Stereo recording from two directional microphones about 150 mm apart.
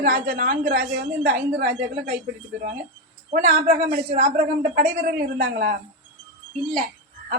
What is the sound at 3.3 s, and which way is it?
A man's voice, 60° right (ahead or behind).